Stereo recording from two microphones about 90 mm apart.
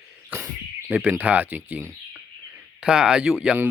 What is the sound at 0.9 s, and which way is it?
Speech, 15° right (ahead or behind).